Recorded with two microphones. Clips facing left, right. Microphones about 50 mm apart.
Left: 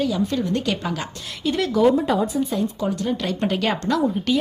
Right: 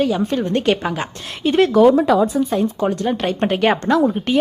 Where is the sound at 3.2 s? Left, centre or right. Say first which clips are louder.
Right 7 dB; right.